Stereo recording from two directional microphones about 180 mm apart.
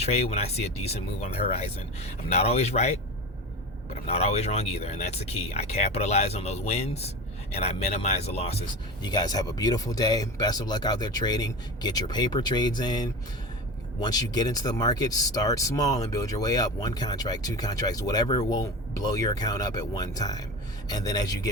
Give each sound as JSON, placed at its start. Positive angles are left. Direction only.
{"t": 0.0, "sound": "speech", "side_deg": 35}
{"t": 4.0, "sound": "speech", "side_deg": 35}
{"t": 9.0, "sound": "speech", "side_deg": 20}